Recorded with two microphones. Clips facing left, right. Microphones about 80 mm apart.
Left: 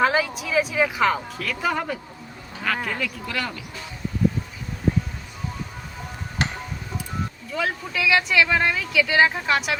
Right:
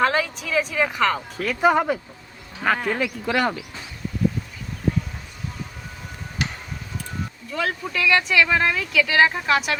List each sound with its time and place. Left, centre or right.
0.0 s speech: centre
1.4 s speech: right
2.7 s a sound: right
3.0 s speech: right
6.4 s tick-tock: left
7.5 s speech: centre